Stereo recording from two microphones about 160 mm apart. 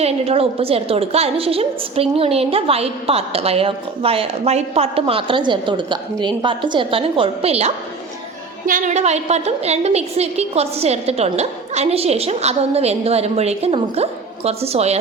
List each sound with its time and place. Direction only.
0.0 s a woman's voice: 40° right (ahead or behind)
8.6 s a woman's voice: 50° right (ahead or behind)